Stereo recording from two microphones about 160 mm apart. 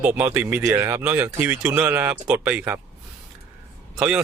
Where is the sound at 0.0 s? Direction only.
10° right (ahead or behind).